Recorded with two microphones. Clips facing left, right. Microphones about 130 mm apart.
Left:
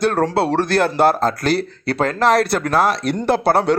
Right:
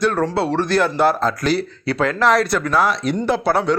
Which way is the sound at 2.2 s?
60° left (ahead or behind).